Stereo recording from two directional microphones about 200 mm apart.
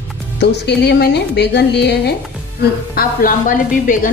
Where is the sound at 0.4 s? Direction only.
55° left (ahead or behind).